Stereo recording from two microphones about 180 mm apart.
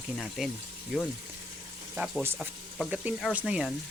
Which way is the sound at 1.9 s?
Centre (ahead or behind).